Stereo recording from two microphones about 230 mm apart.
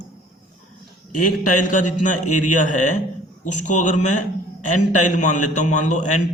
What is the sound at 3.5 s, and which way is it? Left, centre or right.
Speech, left.